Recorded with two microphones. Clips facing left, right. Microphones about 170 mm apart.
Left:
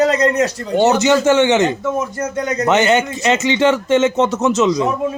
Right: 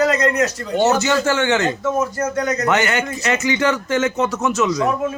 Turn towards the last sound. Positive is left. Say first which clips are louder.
# left 3 dB
turn(degrees=20)  # may be behind; listen again after turning